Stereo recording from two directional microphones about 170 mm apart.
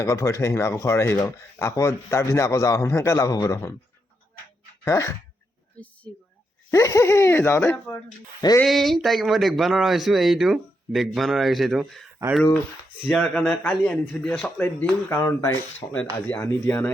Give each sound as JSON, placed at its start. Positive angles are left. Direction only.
{"t": 0.0, "sound": "speech", "side_deg": 20}
{"t": 4.9, "sound": "speech", "side_deg": 20}
{"t": 6.7, "sound": "speech", "side_deg": 20}
{"t": 8.6, "sound": "speech", "side_deg": 0}
{"t": 13.1, "sound": "speech", "side_deg": 5}